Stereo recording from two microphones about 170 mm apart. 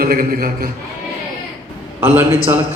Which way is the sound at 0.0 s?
60° right (ahead or behind).